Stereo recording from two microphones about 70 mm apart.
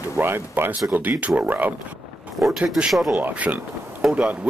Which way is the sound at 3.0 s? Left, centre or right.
Right.